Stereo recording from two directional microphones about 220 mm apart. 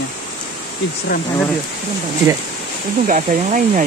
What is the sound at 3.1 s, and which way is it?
Speech, 35° right (ahead or behind).